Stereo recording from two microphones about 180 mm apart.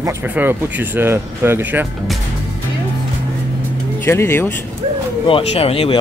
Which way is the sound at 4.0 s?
15° left (ahead or behind).